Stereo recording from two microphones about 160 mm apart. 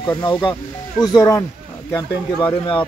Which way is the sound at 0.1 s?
20° left (ahead or behind).